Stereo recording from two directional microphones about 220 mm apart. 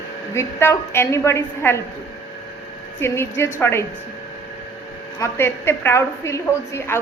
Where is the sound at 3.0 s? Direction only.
10° left (ahead or behind).